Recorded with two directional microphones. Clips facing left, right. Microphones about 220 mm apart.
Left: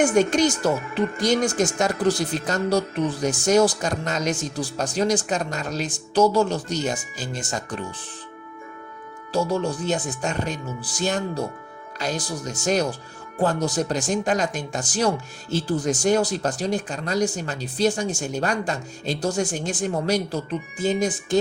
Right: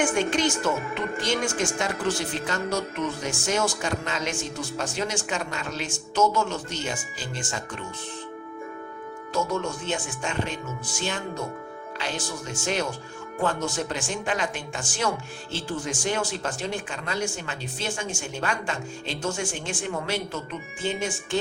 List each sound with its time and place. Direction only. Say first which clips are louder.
0.0 s speech: left 5 dB; 40° left (ahead or behind)
9.3 s speech: left 4 dB; 35° left (ahead or behind)